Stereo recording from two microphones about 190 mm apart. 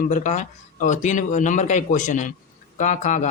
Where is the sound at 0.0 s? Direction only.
40° left (ahead or behind).